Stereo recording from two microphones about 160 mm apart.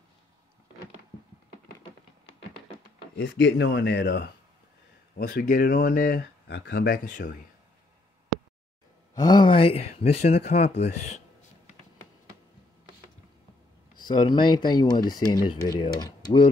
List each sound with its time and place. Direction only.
3.5 s speech: 90° left
5.1 s speech: 65° left (ahead or behind)
9.1 s speech: 25° left (ahead or behind); by 11.2 s 45° left (ahead or behind)
13.9 s speech: 25° left (ahead or behind)